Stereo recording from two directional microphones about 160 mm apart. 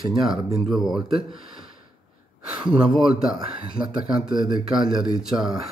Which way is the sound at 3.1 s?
30° right (ahead or behind).